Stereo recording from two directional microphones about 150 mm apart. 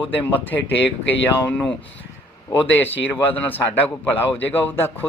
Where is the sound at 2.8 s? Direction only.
15° left (ahead or behind).